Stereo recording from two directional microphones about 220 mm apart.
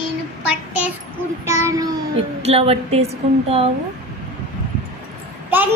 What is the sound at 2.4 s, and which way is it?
Speech, 25° right (ahead or behind).